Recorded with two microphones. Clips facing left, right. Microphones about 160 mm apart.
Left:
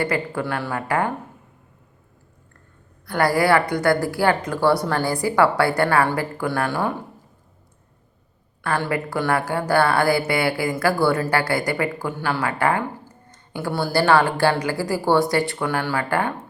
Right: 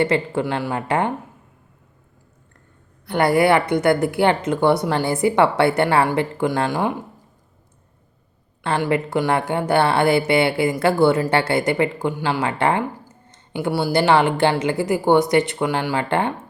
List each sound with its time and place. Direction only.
0.0 s a woman's voice: 25° right (ahead or behind)
3.1 s a woman's voice: 25° right (ahead or behind)
8.6 s a woman's voice: 25° right (ahead or behind)